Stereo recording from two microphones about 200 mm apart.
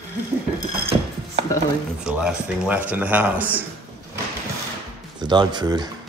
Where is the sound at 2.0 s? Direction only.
5° right (ahead or behind).